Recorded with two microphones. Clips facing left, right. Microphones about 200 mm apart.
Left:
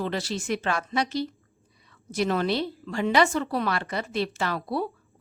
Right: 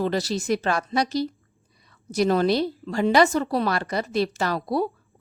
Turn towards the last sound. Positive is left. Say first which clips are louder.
# right 4 dB
turn(degrees=-40)  # may be behind; listen again after turning